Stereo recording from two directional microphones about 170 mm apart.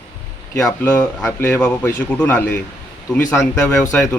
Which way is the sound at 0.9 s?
5° left (ahead or behind).